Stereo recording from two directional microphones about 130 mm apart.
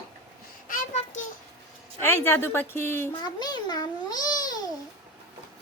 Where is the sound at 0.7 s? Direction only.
90° left.